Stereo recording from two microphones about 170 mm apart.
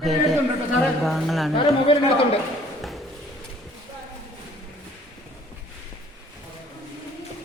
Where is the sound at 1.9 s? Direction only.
30° left (ahead or behind).